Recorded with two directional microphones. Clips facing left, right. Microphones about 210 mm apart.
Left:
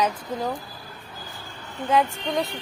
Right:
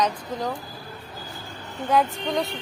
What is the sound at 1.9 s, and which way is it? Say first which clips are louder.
Speech: even; centre (ahead or behind).